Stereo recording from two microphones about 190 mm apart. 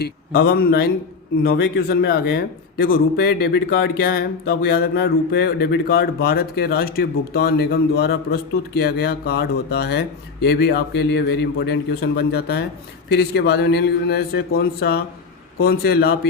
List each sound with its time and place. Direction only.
0.0 s speech: 55° left (ahead or behind)